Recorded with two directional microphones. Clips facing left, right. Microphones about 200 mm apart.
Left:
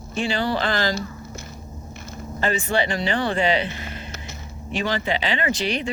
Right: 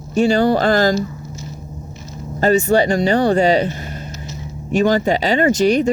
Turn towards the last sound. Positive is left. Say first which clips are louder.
# right 11 dB
turn(degrees=-45)  # may be behind; listen again after turning